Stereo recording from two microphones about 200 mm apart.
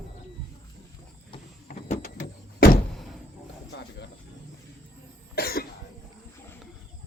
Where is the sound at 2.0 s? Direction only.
50° left (ahead or behind).